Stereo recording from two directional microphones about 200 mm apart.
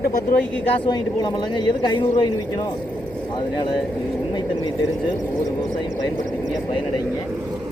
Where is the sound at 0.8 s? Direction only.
20° left (ahead or behind).